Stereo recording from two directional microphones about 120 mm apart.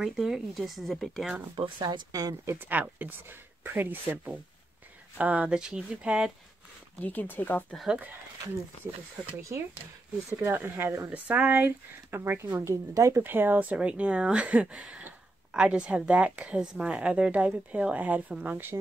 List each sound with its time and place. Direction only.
0.0 s speech: 5° right (ahead or behind)
1.6 s speech: 40° right (ahead or behind)
2.5 s speech: 15° right (ahead or behind)
7.0 s speech: 15° left (ahead or behind)
7.7 s speech: 5° right (ahead or behind)
9.4 s speech: 25° right (ahead or behind)
13.2 s speech: 15° right (ahead or behind)